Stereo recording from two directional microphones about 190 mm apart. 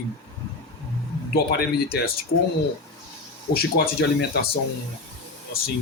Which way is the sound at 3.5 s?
55° left (ahead or behind).